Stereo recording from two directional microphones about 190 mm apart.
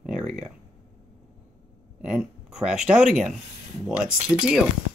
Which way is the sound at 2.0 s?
5° right (ahead or behind).